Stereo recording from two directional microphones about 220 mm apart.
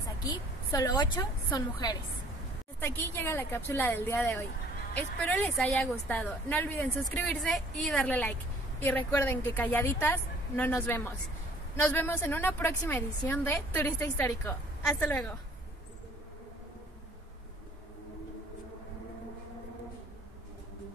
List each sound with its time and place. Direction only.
0.0 s a woman's voice: 15° left (ahead or behind)